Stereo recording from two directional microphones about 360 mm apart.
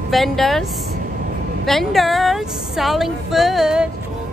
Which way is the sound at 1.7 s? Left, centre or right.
Centre.